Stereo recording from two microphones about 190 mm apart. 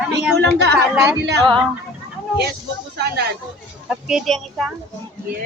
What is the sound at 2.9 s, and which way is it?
Speech, 60° right (ahead or behind).